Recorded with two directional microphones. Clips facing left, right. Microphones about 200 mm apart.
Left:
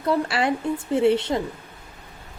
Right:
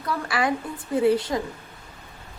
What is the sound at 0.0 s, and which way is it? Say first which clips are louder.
A woman's voice: left 4 dB; 25° left (ahead or behind).